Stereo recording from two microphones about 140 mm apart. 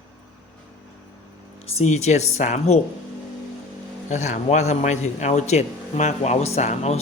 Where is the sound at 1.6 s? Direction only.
50° left (ahead or behind).